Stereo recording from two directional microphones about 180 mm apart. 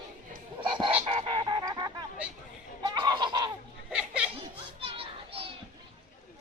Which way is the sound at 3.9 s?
5° right (ahead or behind).